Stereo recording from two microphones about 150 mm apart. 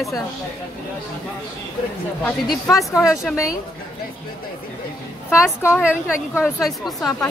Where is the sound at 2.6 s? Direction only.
20° left (ahead or behind).